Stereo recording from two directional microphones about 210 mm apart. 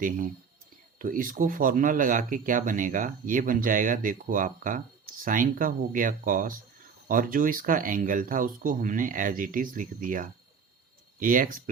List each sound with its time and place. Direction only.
0.9 s speech: 40° right (ahead or behind)